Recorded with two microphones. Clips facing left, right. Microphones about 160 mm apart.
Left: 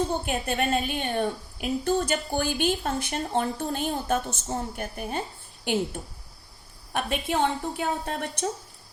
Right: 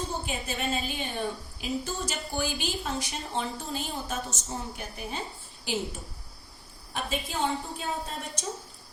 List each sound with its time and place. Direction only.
0.3 s a woman's voice: 60° left (ahead or behind)
6.9 s a woman's voice: 65° left (ahead or behind)